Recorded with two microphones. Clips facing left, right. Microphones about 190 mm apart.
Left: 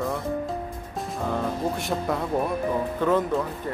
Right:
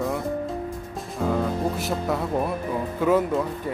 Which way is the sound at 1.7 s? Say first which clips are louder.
Right 1 dB; centre (ahead or behind).